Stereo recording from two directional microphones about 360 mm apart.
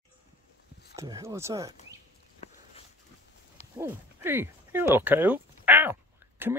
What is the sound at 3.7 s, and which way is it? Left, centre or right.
Speech, centre.